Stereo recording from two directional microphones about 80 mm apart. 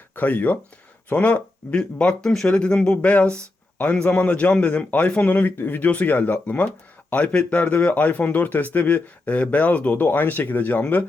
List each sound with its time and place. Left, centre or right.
0.2 s speech: centre